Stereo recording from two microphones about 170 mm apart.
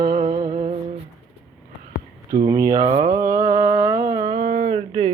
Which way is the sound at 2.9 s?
45° right (ahead or behind).